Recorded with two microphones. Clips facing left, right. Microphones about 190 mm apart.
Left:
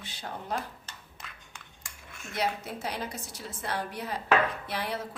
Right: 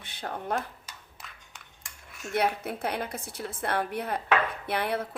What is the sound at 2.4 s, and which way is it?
A woman's voice, 55° right (ahead or behind).